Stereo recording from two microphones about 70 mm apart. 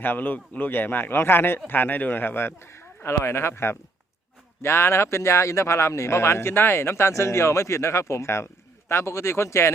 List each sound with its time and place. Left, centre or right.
0.0 s speech: left